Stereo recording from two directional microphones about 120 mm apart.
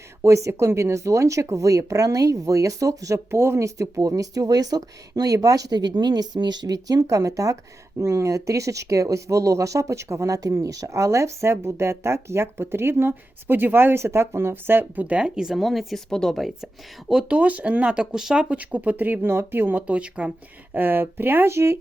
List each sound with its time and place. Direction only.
0.2 s speech: 25° right (ahead or behind)